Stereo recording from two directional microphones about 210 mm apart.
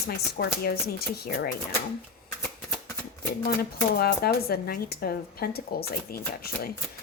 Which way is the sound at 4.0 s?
45° left (ahead or behind).